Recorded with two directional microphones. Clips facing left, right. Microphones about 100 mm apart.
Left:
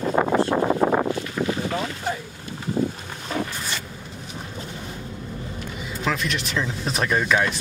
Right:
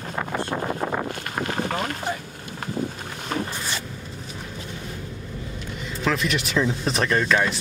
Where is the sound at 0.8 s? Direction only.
45° left (ahead or behind).